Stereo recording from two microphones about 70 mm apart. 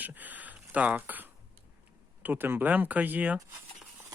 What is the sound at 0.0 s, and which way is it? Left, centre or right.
Speech, right.